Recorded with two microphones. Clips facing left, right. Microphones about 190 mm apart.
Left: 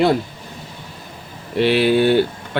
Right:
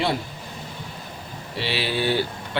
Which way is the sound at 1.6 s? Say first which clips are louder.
Left 11 dB; 55° left (ahead or behind).